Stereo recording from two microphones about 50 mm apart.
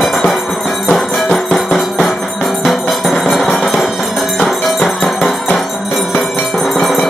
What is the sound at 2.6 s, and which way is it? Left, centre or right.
Music, centre.